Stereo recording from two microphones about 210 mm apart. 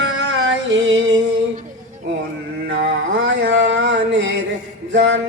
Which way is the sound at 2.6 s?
55° right (ahead or behind).